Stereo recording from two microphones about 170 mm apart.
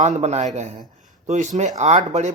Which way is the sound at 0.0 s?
40° right (ahead or behind).